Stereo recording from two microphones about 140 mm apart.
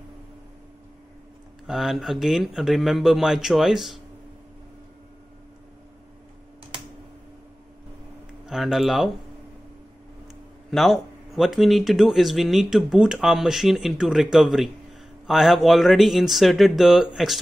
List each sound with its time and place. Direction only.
1.7 s speech: centre (ahead or behind)
8.5 s speech: centre (ahead or behind)
10.7 s speech: centre (ahead or behind)